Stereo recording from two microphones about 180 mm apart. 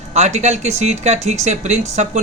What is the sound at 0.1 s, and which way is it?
Speech, 40° right (ahead or behind).